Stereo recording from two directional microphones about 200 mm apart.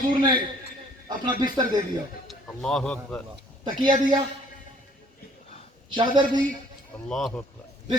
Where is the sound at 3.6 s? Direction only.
20° right (ahead or behind).